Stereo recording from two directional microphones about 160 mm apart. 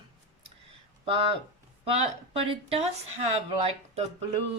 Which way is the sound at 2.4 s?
35° right (ahead or behind).